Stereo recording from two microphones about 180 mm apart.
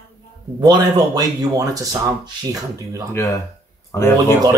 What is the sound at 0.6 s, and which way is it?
Speech, 20° right (ahead or behind).